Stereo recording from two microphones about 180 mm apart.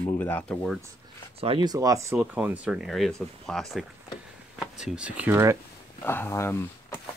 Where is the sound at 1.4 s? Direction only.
25° right (ahead or behind); by 5.6 s 10° right (ahead or behind).